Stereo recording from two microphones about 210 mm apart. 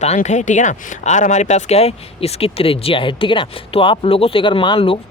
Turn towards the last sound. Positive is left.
turn(degrees=25)  # may be behind; listen again after turning